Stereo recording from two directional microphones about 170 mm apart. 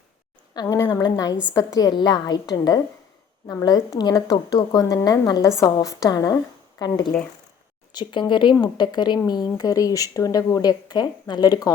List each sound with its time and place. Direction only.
0.5 s speech: 20° left (ahead or behind)